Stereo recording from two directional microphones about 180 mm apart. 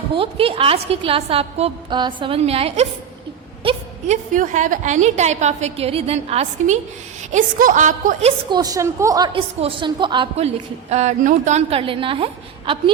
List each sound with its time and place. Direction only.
0.1 s a woman's voice: 30° right (ahead or behind)
3.6 s a sound: 30° right (ahead or behind)
4.4 s a woman's voice: 45° right (ahead or behind)
7.3 s a woman's voice: 45° right (ahead or behind)
8.4 s a woman's voice: 20° right (ahead or behind)